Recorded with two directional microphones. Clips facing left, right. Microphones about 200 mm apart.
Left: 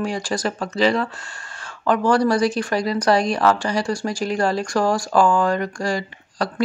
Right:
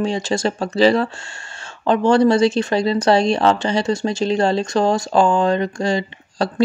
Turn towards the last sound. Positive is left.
turn(degrees=-25)  # may be behind; listen again after turning